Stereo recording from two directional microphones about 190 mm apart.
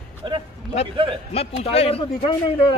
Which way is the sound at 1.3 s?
30° left (ahead or behind).